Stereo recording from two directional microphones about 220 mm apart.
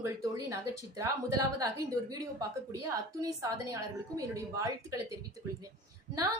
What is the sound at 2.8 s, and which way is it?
A woman's voice, 15° right (ahead or behind).